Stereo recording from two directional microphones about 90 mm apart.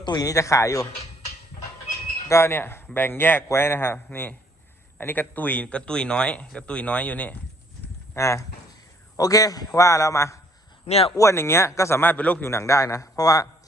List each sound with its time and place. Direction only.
0.0 s a man's voice: 45° left (ahead or behind)
2.3 s a man's voice: 25° left (ahead or behind)
8.1 s a man's voice: 35° left (ahead or behind); by 12.5 s 15° left (ahead or behind)
12.5 s a man's voice: 30° left (ahead or behind)